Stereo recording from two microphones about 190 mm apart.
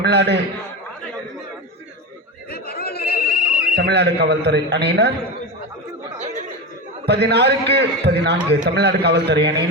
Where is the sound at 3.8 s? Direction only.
60° right (ahead or behind).